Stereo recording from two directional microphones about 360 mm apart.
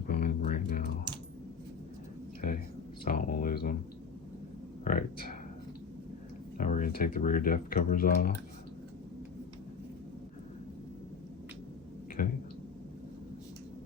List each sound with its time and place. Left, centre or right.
0.1 s typing: left
1.1 s typing: centre
3.0 s speech: left
4.9 s speech: left
6.6 s speech: left
12.2 s a sound: left